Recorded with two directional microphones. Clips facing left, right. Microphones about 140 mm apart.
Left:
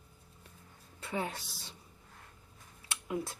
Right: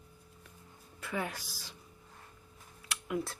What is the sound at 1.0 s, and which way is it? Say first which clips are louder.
Speech: even; 30° left (ahead or behind).